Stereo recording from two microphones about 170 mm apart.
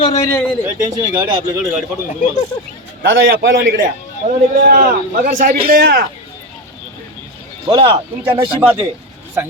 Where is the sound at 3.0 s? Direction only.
75° right (ahead or behind); by 6.0 s 60° right (ahead or behind).